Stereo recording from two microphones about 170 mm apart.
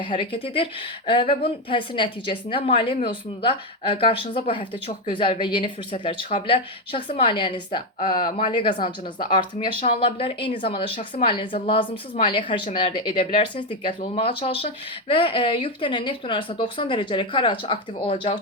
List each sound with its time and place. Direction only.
0.0 s speech: 30° left (ahead or behind)